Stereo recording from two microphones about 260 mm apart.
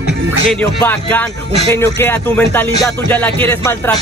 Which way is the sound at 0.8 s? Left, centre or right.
Centre.